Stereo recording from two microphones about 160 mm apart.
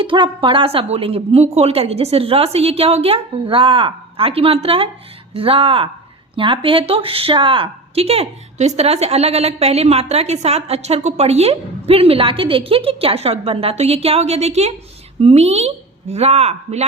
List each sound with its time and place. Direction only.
0.0 s speech: 30° right (ahead or behind)